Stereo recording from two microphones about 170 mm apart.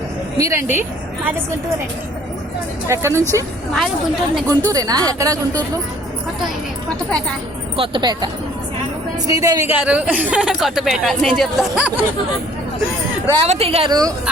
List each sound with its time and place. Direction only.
0.3 s a woman's voice: 15° right (ahead or behind)
2.8 s a woman's voice: 15° right (ahead or behind)
3.8 s a woman's voice: centre (ahead or behind)
4.4 s speech: 20° right (ahead or behind)
7.8 s a woman's voice: 25° right (ahead or behind); by 12.0 s 5° right (ahead or behind)
13.3 s speech: 35° right (ahead or behind)